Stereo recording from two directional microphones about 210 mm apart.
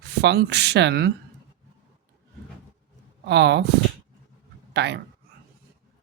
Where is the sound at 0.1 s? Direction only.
50° right (ahead or behind).